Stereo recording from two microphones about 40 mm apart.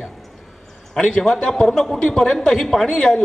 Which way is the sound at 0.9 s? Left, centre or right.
Centre.